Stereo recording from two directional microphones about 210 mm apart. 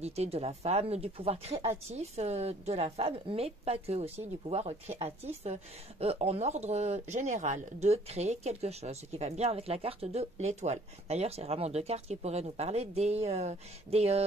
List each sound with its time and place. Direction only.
0.0 s a woman's voice: 30° right (ahead or behind)